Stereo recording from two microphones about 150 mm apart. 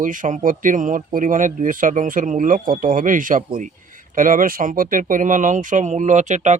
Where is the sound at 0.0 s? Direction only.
60° right (ahead or behind).